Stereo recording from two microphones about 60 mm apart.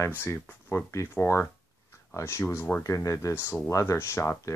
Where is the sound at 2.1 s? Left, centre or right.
Left.